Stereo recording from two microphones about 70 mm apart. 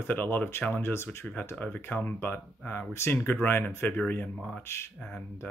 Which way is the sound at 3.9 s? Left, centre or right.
Left.